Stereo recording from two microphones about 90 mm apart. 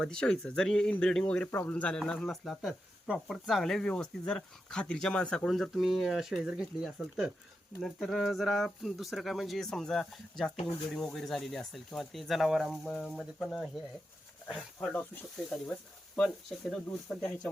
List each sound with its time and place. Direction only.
0.0 s speech: 10° left (ahead or behind)
1.5 s speech: 25° left (ahead or behind)
1.7 s speech: 10° left (ahead or behind)
16.6 s speech: centre (ahead or behind)
17.2 s speech: 10° left (ahead or behind)